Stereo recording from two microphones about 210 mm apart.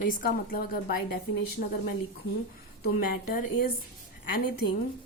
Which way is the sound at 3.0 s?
45° left (ahead or behind).